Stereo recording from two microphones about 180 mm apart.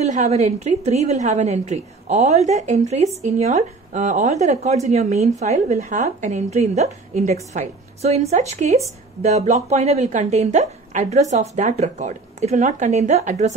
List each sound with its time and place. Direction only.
0.0 s a woman's voice: 40° right (ahead or behind)